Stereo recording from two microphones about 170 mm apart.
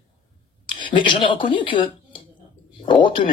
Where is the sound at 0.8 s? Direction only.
30° left (ahead or behind).